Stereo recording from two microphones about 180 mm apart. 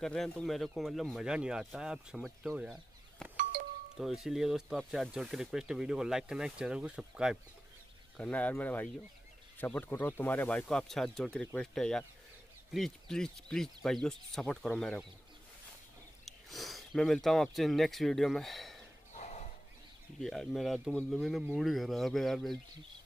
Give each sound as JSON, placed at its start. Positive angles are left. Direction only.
{"t": 0.0, "sound": "speech", "side_deg": 5}
{"t": 3.2, "sound": "doorbell", "side_deg": 5}
{"t": 4.0, "sound": "speech", "side_deg": 0}
{"t": 8.2, "sound": "speech", "side_deg": 10}
{"t": 16.3, "sound": "speech", "side_deg": 0}
{"t": 19.1, "sound": "horse", "side_deg": 40}
{"t": 20.2, "sound": "speech", "side_deg": 0}